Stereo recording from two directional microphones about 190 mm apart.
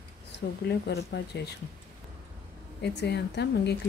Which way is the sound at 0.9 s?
60° left (ahead or behind).